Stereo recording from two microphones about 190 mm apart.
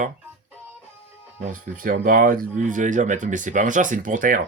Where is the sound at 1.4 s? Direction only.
45° right (ahead or behind).